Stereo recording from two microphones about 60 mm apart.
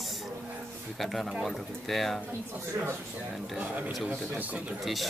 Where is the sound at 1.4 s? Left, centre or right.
Centre.